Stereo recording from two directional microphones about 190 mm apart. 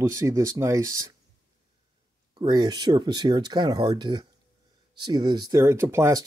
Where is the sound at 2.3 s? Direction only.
20° right (ahead or behind).